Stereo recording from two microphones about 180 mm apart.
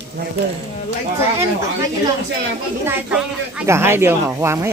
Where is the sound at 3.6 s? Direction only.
15° right (ahead or behind).